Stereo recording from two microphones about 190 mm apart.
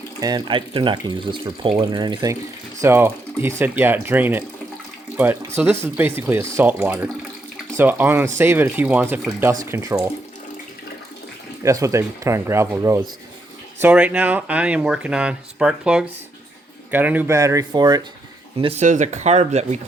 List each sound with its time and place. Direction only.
0.2 s speech: 20° right (ahead or behind)
11.6 s speech: 15° right (ahead or behind)
18.5 s speech: 30° right (ahead or behind)